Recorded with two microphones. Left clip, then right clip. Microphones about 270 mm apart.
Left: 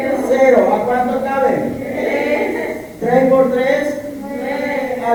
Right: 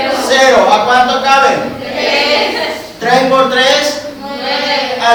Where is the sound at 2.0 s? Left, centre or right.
Centre.